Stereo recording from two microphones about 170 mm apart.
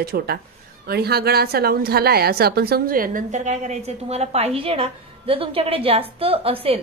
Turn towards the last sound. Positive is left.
turn(degrees=-35)  # may be behind; listen again after turning